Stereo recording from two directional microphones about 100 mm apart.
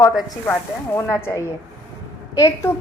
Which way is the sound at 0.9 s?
25° left (ahead or behind).